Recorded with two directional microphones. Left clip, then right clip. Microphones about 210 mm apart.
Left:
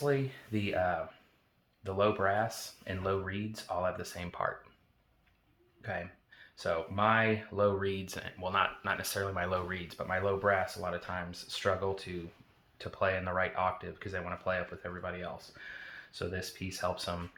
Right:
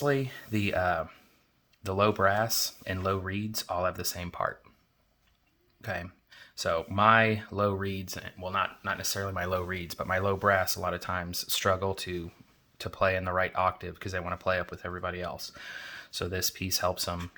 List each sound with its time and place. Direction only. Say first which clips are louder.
0.0 s speech: right 3 dB; 40° right (ahead or behind)
5.8 s speech: right 3 dB; 40° right (ahead or behind)